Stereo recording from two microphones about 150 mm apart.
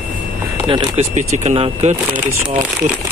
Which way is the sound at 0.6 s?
35° right (ahead or behind).